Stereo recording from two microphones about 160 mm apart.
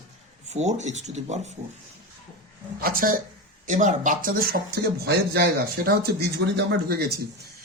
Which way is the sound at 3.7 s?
50° right (ahead or behind).